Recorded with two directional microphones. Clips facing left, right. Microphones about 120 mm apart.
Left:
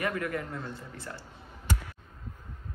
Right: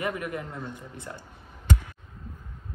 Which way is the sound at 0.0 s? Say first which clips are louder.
Even; 20° right (ahead or behind).